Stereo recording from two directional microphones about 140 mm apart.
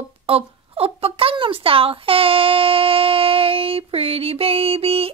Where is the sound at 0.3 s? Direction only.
45° right (ahead or behind).